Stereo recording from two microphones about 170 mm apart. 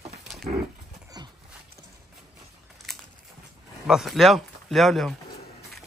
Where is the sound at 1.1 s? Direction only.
25° right (ahead or behind).